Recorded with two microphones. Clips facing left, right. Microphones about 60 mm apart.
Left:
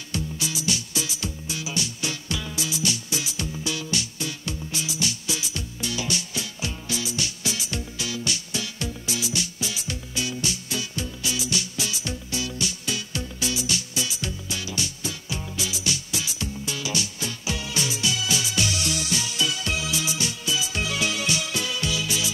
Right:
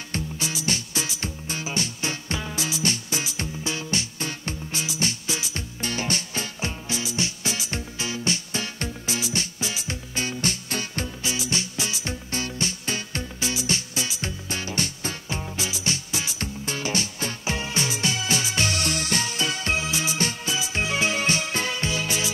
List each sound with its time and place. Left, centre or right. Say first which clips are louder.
0.1 s music: left 1 dB; right
6.9 s music: even; right
11.2 s music: even; right